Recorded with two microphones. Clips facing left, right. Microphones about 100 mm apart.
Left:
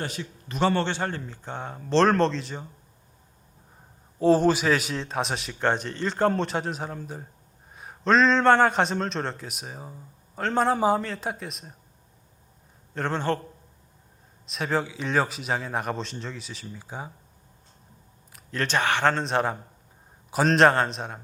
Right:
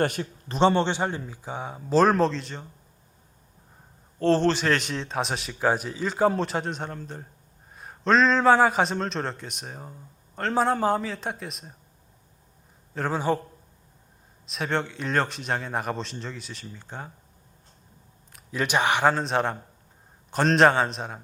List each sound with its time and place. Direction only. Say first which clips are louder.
0.0 s speech: right 8 dB; 55° right (ahead or behind)
0.4 s speech: right 3 dB; 30° right (ahead or behind); by 2.6 s centre (ahead or behind)
4.2 s a man's voice: left 2 dB; 10° left (ahead or behind)
12.9 s speech: right 1 dB; 5° right (ahead or behind)
14.4 s a man's voice: left 1 dB; centre (ahead or behind)
18.3 s a sound: even; centre (ahead or behind)
18.6 s speech: right 1 dB; 15° right (ahead or behind)
19.2 s a man's voice: even; centre (ahead or behind)